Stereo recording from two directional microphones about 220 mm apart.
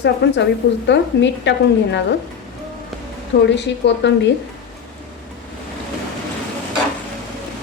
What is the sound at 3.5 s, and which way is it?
Speech, 50° left (ahead or behind).